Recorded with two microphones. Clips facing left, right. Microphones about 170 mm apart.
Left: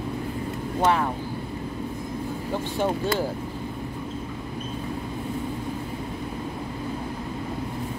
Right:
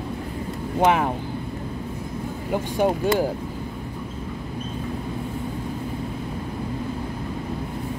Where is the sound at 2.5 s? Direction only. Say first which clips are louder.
Right 5 dB; 15° right (ahead or behind).